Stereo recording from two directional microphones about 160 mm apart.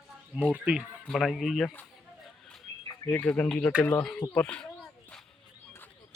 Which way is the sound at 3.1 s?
10° left (ahead or behind).